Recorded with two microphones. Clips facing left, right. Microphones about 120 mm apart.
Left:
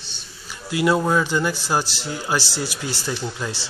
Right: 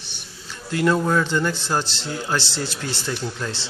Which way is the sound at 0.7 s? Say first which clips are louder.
Left 1 dB; 10° left (ahead or behind).